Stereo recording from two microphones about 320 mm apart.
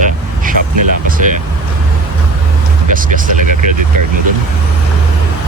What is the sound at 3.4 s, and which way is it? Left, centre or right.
Vehicle, right.